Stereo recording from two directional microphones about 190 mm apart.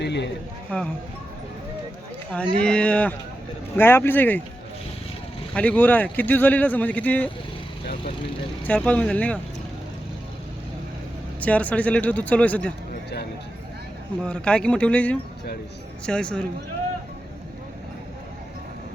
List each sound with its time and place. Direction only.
0.0 s a sound: 65° left (ahead or behind)
0.7 s speech: 5° left (ahead or behind)
2.6 s speech: 5° left (ahead or behind)
5.5 s speech: 10° left (ahead or behind)
8.6 s speech: 5° left (ahead or behind)
11.3 s speech: 5° left (ahead or behind)
12.9 s a sound: 60° left (ahead or behind)
14.2 s speech: 5° left (ahead or behind)